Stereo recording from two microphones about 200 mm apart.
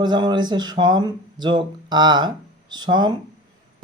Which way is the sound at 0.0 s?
20° right (ahead or behind).